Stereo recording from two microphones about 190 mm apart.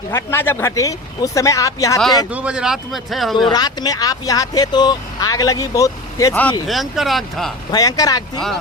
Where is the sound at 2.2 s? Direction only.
5° right (ahead or behind).